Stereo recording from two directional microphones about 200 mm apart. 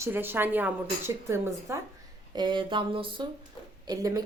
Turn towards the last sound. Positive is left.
turn(degrees=-20)  # may be behind; listen again after turning